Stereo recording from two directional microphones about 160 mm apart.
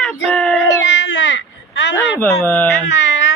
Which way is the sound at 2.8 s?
90° left.